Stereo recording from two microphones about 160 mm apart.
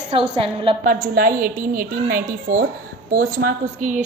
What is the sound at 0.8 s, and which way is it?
A woman's voice, 55° right (ahead or behind).